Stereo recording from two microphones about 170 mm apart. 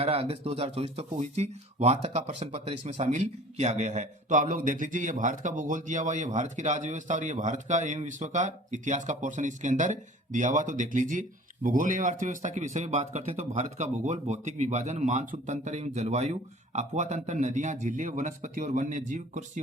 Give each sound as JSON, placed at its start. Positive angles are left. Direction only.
{"t": 0.0, "sound": "speech", "side_deg": -35}